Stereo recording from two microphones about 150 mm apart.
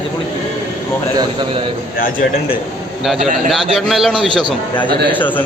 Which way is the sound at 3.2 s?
Centre (ahead or behind).